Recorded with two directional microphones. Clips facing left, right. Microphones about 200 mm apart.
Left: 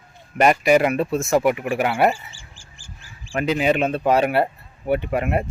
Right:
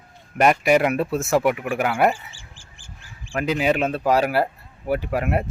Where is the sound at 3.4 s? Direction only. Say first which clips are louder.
Left 1 dB; centre (ahead or behind).